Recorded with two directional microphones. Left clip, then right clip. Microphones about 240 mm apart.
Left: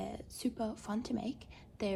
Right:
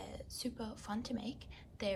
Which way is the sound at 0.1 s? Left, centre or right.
Left.